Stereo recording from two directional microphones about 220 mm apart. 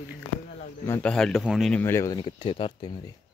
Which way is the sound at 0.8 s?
10° left (ahead or behind).